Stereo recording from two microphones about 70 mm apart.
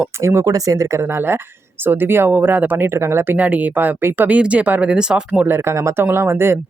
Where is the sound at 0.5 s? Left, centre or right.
Right.